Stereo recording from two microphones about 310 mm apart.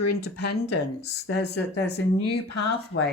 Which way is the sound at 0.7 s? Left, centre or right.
Left.